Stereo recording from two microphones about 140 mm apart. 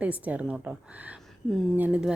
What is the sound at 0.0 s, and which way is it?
A woman's voice, 10° right (ahead or behind).